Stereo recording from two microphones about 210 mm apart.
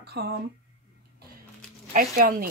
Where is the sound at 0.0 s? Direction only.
50° right (ahead or behind).